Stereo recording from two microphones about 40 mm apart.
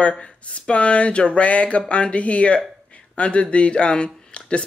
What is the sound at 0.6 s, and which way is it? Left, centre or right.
Speech, left.